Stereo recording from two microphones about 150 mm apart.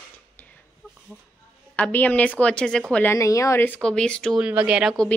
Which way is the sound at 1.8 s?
10° left (ahead or behind).